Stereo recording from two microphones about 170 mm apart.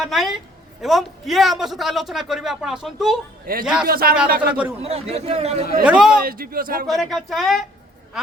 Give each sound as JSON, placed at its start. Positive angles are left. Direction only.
{"t": 0.0, "sound": "a man's voice", "side_deg": 0}
{"t": 3.5, "sound": "a man's voice", "side_deg": -60}
{"t": 4.4, "sound": "a man's voice", "side_deg": -5}
{"t": 4.8, "sound": "speech", "side_deg": -35}
{"t": 5.8, "sound": "a man's voice", "side_deg": -5}
{"t": 6.2, "sound": "a man's voice", "side_deg": -60}
{"t": 6.8, "sound": "a man's voice", "side_deg": 0}